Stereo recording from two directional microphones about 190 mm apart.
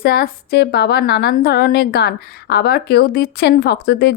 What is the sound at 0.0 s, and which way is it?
A woman's voice, 55° left (ahead or behind).